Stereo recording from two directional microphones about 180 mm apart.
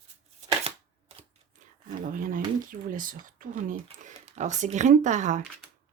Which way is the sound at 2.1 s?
50° right (ahead or behind).